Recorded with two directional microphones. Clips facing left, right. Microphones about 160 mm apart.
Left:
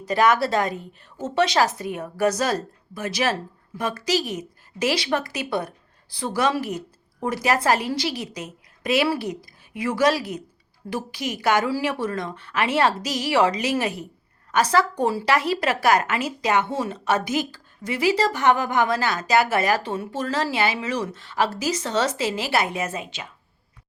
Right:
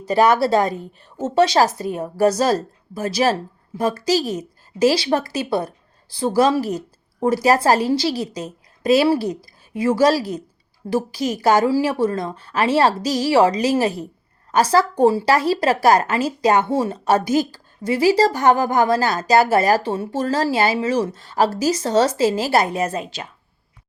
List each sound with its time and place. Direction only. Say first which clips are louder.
0.0 s a woman's voice: right 4 dB; 30° right (ahead or behind)